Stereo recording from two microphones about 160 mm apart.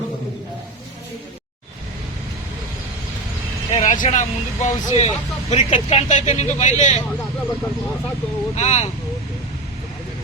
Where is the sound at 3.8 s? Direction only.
50° left (ahead or behind).